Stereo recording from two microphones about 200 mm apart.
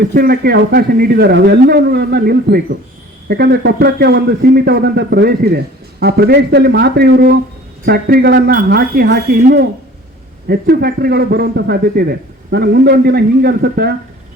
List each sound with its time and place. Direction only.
0.1 s a man's voice: 50° right (ahead or behind)